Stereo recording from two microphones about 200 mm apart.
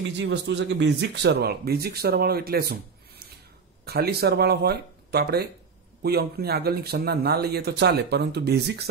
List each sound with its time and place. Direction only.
0.2 s speech: 60° right (ahead or behind)
3.8 s speech: 50° right (ahead or behind)